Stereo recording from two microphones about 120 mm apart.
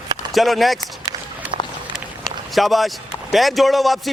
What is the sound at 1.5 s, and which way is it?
Run, 55° right (ahead or behind).